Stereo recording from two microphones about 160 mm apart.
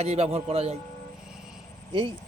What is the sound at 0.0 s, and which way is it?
Speech, 40° right (ahead or behind).